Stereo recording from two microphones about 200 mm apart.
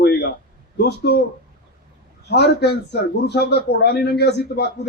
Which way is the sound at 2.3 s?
55° left (ahead or behind).